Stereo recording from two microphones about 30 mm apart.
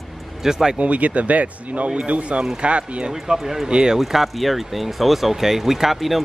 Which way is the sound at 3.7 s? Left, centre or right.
Right.